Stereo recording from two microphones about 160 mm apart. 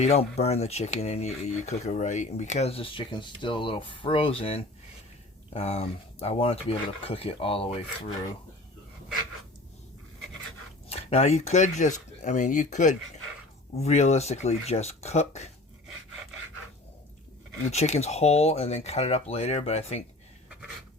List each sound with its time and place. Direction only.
0.0 s speech: 40° left (ahead or behind)
10.8 s speech: 40° left (ahead or behind)
17.6 s speech: 45° left (ahead or behind)